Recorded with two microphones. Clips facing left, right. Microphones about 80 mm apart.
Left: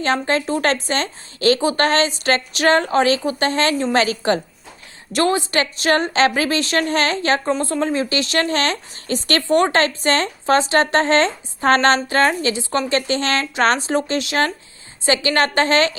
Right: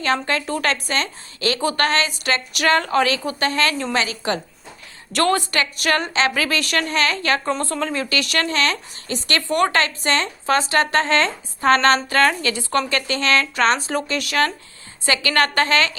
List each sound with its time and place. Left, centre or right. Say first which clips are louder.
0.0 s speech: left 2 dB; left
5.1 s a woman's voice: left 1 dB; centre
5.5 s speech: left 3 dB; left
9.5 s speech: left 3 dB; left